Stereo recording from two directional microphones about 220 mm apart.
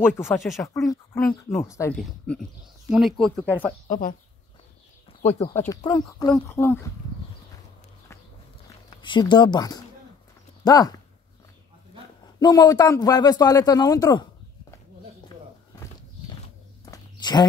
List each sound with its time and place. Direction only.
0.0 s a man's voice: 10° left (ahead or behind)
3.8 s speech: 40° left (ahead or behind)
5.4 s a man's voice: 15° left (ahead or behind)
8.9 s speech: 20° left (ahead or behind)
12.4 s a man's voice: 15° left (ahead or behind)
15.2 s a sound: 15° left (ahead or behind)